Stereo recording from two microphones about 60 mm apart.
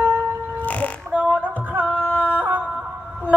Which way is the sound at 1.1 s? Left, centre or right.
Right.